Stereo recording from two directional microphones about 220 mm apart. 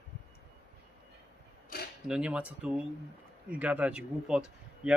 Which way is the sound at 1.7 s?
40° left (ahead or behind).